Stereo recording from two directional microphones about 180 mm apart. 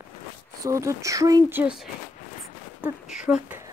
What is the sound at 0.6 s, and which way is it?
Speech, 15° right (ahead or behind).